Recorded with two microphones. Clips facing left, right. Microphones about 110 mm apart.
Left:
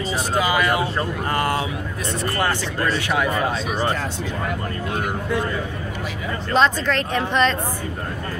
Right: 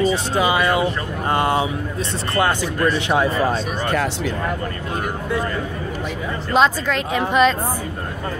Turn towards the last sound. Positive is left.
turn(degrees=-10)  # may be behind; listen again after turning